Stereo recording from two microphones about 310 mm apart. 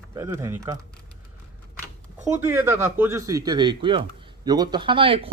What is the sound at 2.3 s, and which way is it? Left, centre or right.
Speech, centre.